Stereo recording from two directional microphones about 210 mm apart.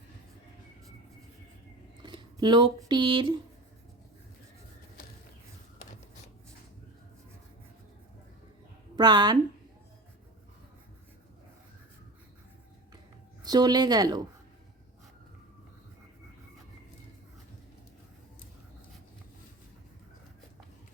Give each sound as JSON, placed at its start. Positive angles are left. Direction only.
{"t": 2.0, "sound": "speech", "side_deg": -20}
{"t": 9.0, "sound": "a woman's voice", "side_deg": -20}
{"t": 13.4, "sound": "a woman's voice", "side_deg": -20}